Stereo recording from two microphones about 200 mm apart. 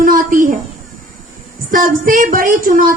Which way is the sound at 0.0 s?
45° right (ahead or behind).